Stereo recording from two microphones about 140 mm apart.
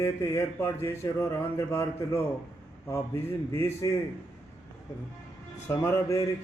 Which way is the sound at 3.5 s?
20° left (ahead or behind).